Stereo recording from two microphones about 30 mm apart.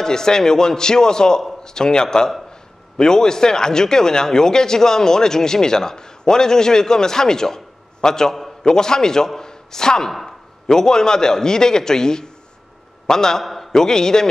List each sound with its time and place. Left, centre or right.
0.0 s a man's voice: left
13.4 s a sound: centre
13.7 s speech: centre